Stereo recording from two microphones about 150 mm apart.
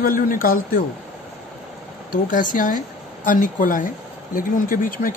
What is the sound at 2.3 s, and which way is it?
Speech, 60° left (ahead or behind).